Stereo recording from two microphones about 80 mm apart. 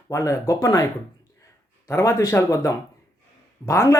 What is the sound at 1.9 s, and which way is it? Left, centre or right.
Speech, left.